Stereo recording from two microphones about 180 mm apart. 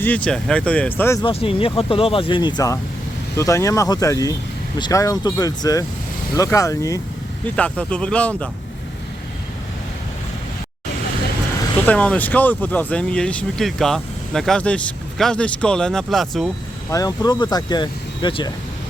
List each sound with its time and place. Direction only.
0.0 s speech: 5° left (ahead or behind)
1.2 s speech: 30° left (ahead or behind)
7.5 s speech: 5° left (ahead or behind)
11.9 s speech: 10° left (ahead or behind)
16.9 s speech: 20° left (ahead or behind)